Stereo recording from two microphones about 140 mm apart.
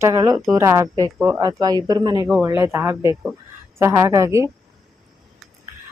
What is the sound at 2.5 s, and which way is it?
A woman's voice, 20° right (ahead or behind).